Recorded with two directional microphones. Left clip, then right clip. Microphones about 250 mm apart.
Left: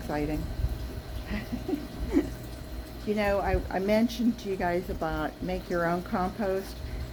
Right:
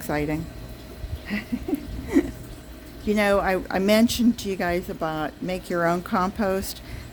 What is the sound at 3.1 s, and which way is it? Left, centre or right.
Speech, right.